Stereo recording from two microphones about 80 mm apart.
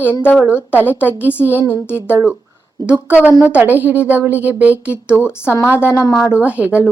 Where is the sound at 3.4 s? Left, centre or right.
Centre.